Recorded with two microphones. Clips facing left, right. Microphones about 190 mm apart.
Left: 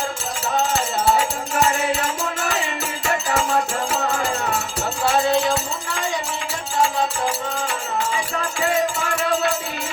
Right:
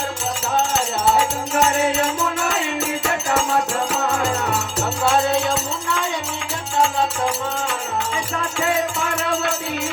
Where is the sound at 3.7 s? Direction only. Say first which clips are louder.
Right 1 dB; 70° right (ahead or behind).